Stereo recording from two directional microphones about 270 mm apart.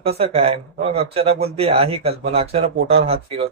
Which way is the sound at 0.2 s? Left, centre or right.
Right.